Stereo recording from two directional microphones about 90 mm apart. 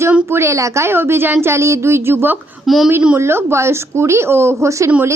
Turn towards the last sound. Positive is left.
turn(degrees=-35)  # may be behind; listen again after turning